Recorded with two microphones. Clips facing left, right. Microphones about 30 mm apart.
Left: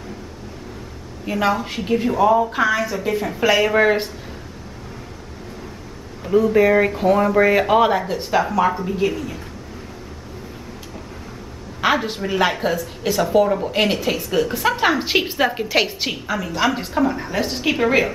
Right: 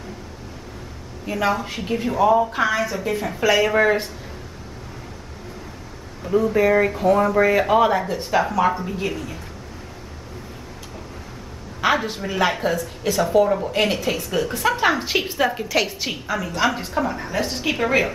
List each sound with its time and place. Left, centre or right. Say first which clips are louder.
1.2 s a woman's voice: left 2 dB; centre
6.2 s a woman's voice: left 3 dB; centre
11.8 s a woman's voice: left 1 dB; centre
16.1 s a woman's voice: left 1 dB; centre